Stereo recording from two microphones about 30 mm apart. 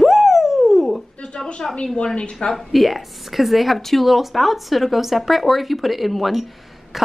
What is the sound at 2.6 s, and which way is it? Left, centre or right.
Speech, centre.